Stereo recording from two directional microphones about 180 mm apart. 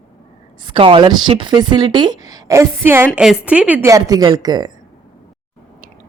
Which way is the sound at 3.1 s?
5° right (ahead or behind).